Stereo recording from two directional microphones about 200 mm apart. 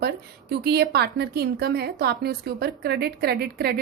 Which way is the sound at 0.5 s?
55° right (ahead or behind).